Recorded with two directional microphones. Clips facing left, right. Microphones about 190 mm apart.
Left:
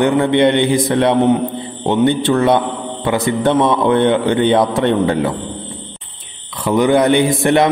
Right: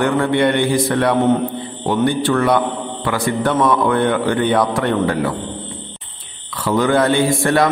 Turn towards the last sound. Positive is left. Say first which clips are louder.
# left 2 dB
turn(degrees=20)  # may be behind; listen again after turning